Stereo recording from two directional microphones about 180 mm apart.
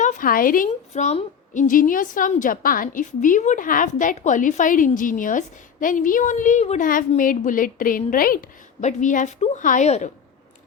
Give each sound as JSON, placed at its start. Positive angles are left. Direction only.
{"t": 0.0, "sound": "a woman's voice", "side_deg": 45}
{"t": 8.8, "sound": "a woman's voice", "side_deg": 40}